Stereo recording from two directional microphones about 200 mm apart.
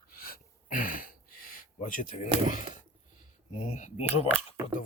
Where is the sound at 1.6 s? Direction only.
40° left (ahead or behind).